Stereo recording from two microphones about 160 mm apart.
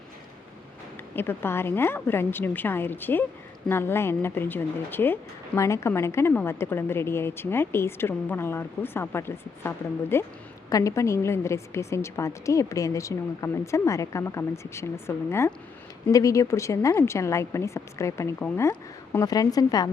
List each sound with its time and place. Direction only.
1.1 s a woman's voice: 15° left (ahead or behind)